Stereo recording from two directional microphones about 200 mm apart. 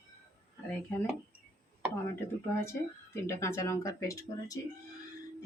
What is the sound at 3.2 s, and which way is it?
Speech, 15° left (ahead or behind).